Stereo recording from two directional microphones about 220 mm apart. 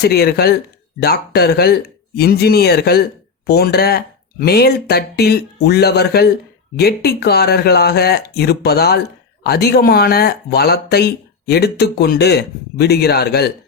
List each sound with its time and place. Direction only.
0.0 s speech: 45° left (ahead or behind)